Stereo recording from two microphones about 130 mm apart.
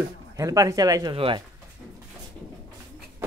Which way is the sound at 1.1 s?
45° right (ahead or behind).